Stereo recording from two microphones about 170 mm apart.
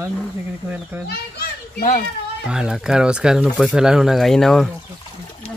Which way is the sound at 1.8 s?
55° left (ahead or behind).